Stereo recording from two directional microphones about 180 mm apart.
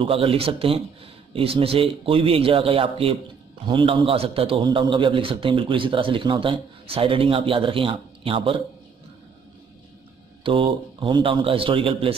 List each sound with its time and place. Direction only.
0.0 s a man's voice: 30° right (ahead or behind)
10.4 s a man's voice: 30° right (ahead or behind)